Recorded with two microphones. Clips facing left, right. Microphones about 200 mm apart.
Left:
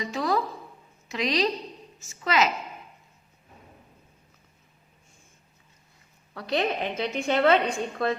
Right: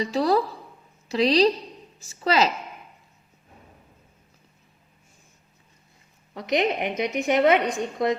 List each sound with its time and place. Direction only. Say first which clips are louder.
0.0 s a woman's voice: right 5 dB; 35° right (ahead or behind)
6.3 s a woman's voice: right 3 dB; 20° right (ahead or behind)